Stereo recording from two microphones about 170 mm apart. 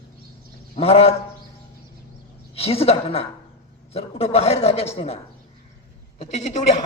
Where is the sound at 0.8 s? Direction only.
35° left (ahead or behind).